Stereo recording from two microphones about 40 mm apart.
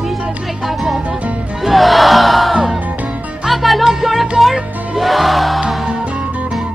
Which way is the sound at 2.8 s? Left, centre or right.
Right.